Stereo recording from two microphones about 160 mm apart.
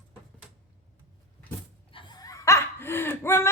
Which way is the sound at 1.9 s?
20° left (ahead or behind).